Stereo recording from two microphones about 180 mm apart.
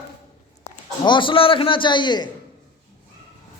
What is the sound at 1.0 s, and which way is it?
A man's voice, 25° left (ahead or behind).